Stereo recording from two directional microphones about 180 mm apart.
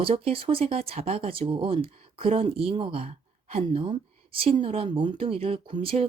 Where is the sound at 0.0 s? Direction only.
30° right (ahead or behind).